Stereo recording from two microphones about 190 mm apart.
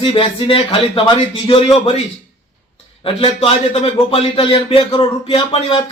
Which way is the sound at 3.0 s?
30° left (ahead or behind).